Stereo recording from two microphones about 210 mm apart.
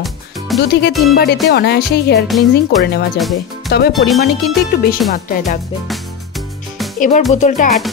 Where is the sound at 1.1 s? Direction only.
50° left (ahead or behind).